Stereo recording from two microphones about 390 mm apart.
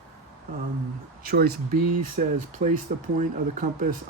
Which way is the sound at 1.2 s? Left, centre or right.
Right.